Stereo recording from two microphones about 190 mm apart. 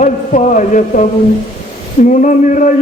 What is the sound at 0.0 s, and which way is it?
Speech, 40° left (ahead or behind).